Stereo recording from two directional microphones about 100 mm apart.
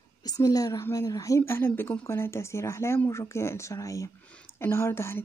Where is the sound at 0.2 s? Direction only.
40° left (ahead or behind).